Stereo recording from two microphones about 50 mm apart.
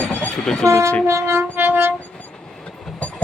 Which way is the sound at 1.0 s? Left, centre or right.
Right.